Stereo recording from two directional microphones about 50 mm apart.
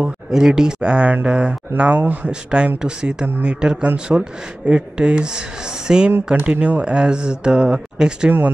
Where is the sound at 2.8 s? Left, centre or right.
Centre.